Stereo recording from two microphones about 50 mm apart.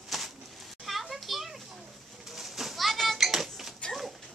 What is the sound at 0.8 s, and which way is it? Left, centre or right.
Children playing, centre.